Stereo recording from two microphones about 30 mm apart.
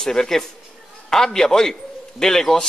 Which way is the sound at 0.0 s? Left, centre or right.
Left.